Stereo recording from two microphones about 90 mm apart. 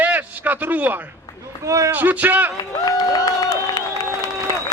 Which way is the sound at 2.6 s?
45° left (ahead or behind).